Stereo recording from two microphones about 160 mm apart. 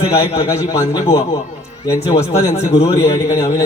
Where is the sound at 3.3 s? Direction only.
20° left (ahead or behind).